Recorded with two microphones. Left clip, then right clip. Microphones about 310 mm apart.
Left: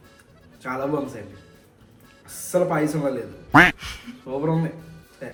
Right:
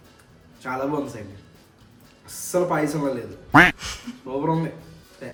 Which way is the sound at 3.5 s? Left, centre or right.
Centre.